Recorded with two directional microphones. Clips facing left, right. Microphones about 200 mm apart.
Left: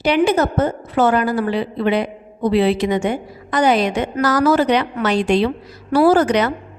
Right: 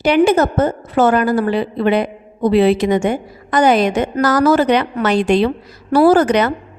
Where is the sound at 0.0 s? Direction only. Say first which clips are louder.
Right 3 dB; 50° right (ahead or behind).